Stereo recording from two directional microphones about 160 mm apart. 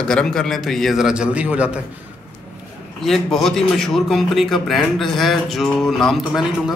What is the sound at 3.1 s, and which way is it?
A man's voice, centre (ahead or behind).